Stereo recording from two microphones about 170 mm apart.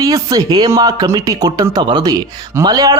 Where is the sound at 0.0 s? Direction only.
20° right (ahead or behind).